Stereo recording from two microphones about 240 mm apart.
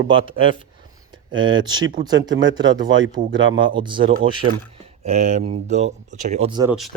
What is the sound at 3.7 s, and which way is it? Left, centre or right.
Speech, centre.